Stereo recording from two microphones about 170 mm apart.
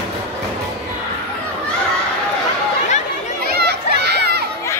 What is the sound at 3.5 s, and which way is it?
Children playing, 75° right (ahead or behind).